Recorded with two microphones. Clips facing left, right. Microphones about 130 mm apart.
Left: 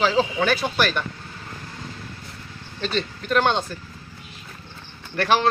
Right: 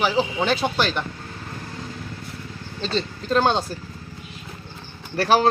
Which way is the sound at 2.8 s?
30° right (ahead or behind).